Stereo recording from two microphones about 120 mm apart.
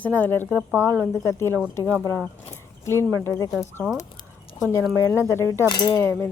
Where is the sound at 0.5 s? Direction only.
15° right (ahead or behind).